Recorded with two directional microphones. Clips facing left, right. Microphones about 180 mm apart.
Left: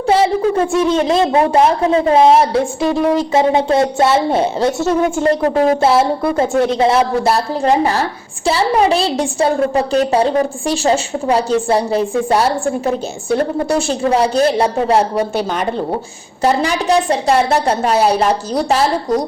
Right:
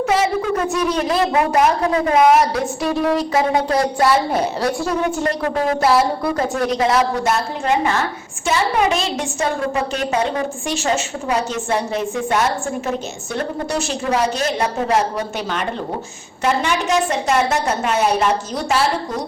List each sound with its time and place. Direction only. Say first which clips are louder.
0.1 s a woman's voice: left 8 dB; 30° left (ahead or behind)